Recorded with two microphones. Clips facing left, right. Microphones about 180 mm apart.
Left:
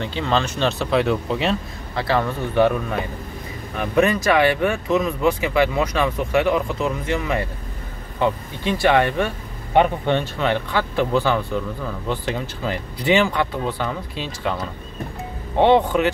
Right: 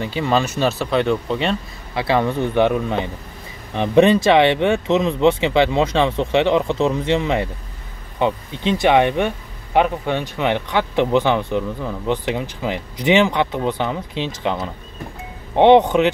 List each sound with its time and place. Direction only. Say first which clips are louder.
0.0 s speech: right 3 dB; 10° right (ahead or behind)
2.0 s speech: right 3 dB; 15° right (ahead or behind)
9.8 s speech: left 1 dB; 5° right (ahead or behind)